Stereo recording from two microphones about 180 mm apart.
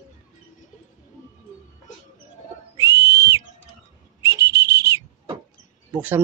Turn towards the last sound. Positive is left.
turn(degrees=-10)  # may be behind; listen again after turning